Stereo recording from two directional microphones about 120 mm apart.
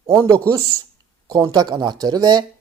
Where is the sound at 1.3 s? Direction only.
35° right (ahead or behind).